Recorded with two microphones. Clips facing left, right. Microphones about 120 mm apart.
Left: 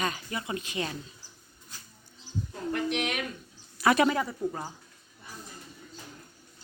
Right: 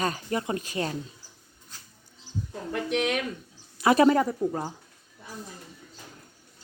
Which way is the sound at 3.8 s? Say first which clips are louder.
Right 3 dB; 25° right (ahead or behind).